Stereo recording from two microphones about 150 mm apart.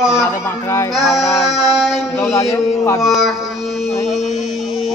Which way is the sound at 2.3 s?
20° left (ahead or behind).